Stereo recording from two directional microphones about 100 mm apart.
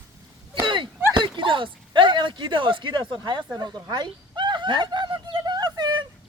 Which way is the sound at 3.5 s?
40° right (ahead or behind).